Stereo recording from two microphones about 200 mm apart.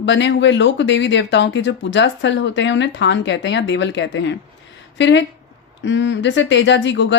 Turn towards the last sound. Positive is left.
turn(degrees=60)  # may be behind; listen again after turning